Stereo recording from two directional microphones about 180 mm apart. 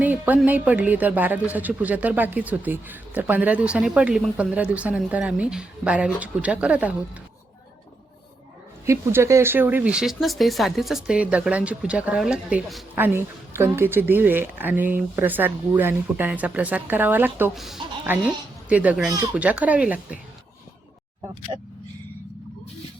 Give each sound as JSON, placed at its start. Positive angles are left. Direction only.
{"t": 0.0, "sound": "a woman's voice", "side_deg": -10}
{"t": 8.9, "sound": "a woman's voice", "side_deg": -15}
{"t": 21.5, "sound": "speech", "side_deg": -25}